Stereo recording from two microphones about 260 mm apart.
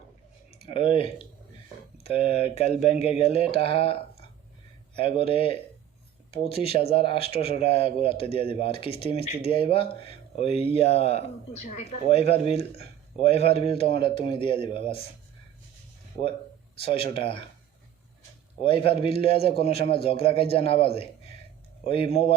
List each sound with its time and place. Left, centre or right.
0.5 s speech: left
16.8 s speech: left
18.6 s speech: left